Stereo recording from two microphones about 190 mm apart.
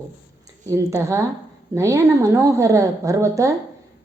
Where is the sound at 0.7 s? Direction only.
15° right (ahead or behind).